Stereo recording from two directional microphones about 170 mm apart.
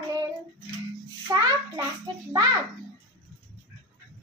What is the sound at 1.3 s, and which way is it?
A child's voice, 25° right (ahead or behind).